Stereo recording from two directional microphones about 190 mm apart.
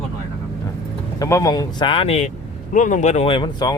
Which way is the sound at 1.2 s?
15° left (ahead or behind).